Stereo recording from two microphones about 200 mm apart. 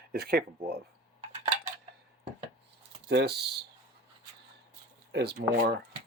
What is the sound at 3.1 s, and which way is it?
Speech, 55° right (ahead or behind).